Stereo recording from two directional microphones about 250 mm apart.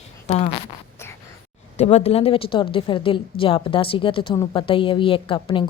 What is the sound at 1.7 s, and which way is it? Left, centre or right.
A woman's voice, left.